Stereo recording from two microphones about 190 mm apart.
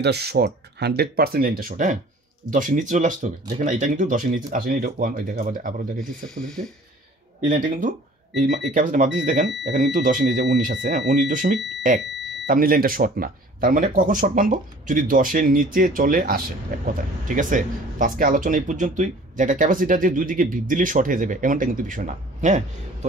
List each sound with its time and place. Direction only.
0.0 s speech: 60° right (ahead or behind)
6.2 s speech: 5° left (ahead or behind)
7.4 s speech: 45° right (ahead or behind)
10.4 s speech: 60° right (ahead or behind); by 22.6 s 40° right (ahead or behind)